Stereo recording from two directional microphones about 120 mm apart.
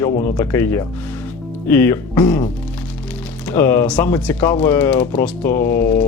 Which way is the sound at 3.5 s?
20° left (ahead or behind).